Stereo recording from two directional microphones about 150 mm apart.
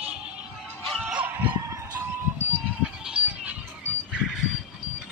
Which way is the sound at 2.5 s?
10° right (ahead or behind).